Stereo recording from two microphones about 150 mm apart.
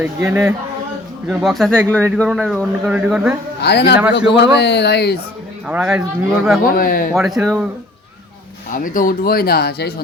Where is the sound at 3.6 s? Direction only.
90° left.